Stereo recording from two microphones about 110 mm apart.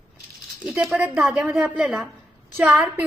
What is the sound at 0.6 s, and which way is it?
A woman's voice, 5° right (ahead or behind).